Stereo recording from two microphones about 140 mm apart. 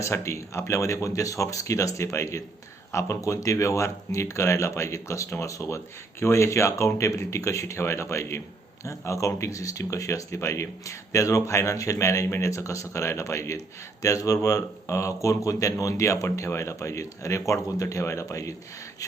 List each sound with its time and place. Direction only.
0.0 s speech: 20° left (ahead or behind)